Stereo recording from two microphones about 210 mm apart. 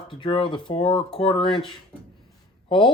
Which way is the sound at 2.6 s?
25° left (ahead or behind).